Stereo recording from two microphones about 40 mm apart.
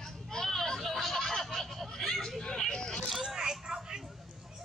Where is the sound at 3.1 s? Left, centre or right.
Centre.